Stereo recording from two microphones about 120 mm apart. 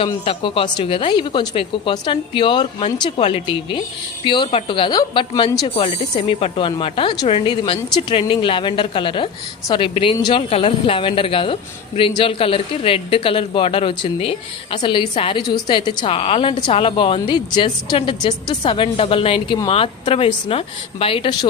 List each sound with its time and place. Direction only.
0.3 s speech: 45° left (ahead or behind)